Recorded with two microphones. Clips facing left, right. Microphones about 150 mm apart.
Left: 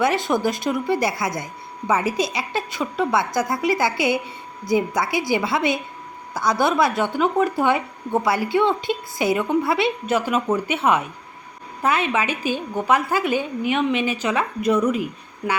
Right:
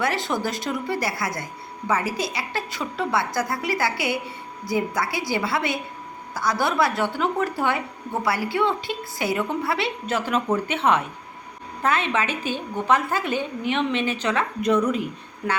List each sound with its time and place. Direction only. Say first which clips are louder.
0.0 s a woman's voice: left 5 dB; 20° left (ahead or behind); by 15.6 s centre (ahead or behind)